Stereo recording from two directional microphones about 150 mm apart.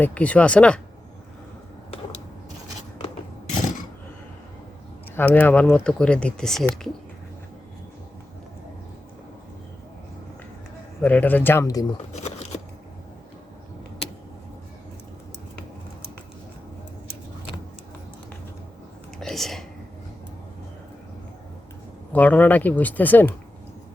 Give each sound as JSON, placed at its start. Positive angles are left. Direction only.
{"t": 0.0, "sound": "speech", "side_deg": 10}
{"t": 5.1, "sound": "speech", "side_deg": 10}
{"t": 11.0, "sound": "speech", "side_deg": 10}
{"t": 12.1, "sound": "shuffling cards", "side_deg": 50}
{"t": 19.2, "sound": "a sound", "side_deg": 0}
{"t": 22.1, "sound": "speech", "side_deg": 10}